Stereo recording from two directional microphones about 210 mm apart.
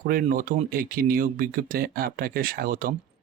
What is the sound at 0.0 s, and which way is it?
Speech, 40° right (ahead or behind).